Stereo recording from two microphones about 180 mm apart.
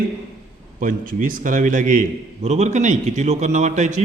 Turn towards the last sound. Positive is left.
turn(degrees=-40)  # may be behind; listen again after turning